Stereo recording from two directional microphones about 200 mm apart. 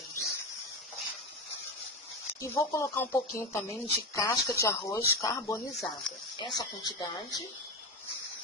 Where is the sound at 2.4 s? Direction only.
15° left (ahead or behind).